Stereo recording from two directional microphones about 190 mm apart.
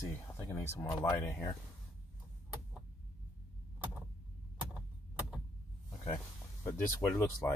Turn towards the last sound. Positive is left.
turn(degrees=10)  # may be behind; listen again after turning